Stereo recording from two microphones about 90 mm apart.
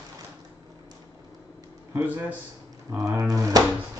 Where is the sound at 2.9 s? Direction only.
35° right (ahead or behind).